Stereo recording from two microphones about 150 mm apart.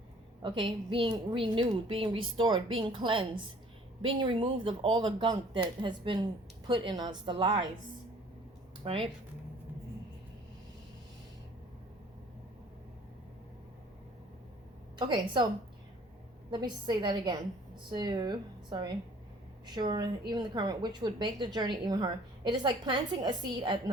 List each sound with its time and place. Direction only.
0.4 s a woman's voice: 35° right (ahead or behind)
8.8 s speech: 35° right (ahead or behind)
14.9 s a woman's voice: 30° right (ahead or behind)
16.5 s a woman's voice: 30° right (ahead or behind)